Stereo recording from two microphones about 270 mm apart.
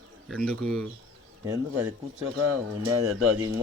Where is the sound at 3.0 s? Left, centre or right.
Right.